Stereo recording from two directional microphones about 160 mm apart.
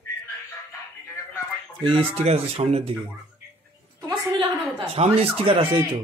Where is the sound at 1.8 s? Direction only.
40° right (ahead or behind).